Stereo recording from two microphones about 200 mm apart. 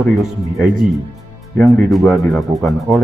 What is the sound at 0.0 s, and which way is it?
Speech, centre (ahead or behind).